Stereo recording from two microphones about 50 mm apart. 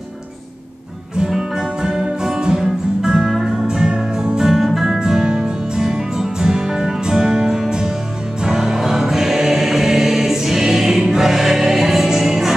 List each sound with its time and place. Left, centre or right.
1.3 s music: centre
4.5 s music: centre